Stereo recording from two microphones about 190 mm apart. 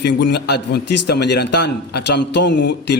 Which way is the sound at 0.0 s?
65° left (ahead or behind).